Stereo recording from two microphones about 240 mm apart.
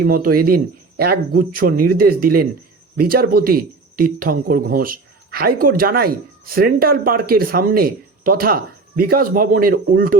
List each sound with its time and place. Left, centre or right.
0.0 s a man's voice: right